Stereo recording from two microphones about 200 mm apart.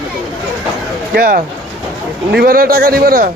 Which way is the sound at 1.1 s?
45° right (ahead or behind).